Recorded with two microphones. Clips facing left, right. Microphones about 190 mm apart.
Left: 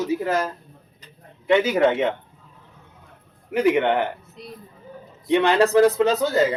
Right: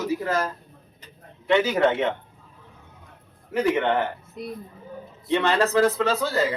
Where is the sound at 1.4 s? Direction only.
10° left (ahead or behind).